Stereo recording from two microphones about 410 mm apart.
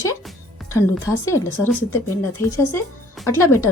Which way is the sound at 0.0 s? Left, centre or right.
Centre.